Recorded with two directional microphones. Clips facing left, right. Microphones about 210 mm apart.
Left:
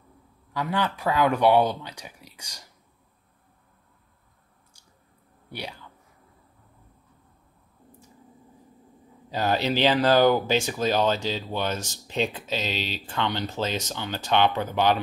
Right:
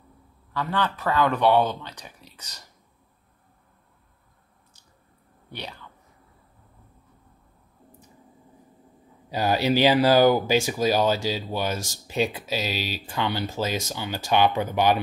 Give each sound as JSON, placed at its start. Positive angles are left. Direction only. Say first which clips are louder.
{"t": 0.5, "sound": "speech", "louder": "even", "side_deg": 10}
{"t": 5.5, "sound": "speech", "louder": "left 1 dB", "side_deg": 10}
{"t": 9.3, "sound": "speech", "louder": "right 2 dB", "side_deg": -10}